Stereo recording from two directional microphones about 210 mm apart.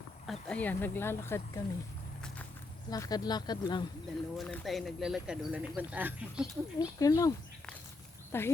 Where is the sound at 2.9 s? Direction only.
20° left (ahead or behind).